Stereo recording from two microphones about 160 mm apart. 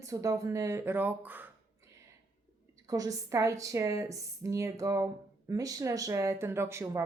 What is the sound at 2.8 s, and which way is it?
A woman's voice, 25° right (ahead or behind).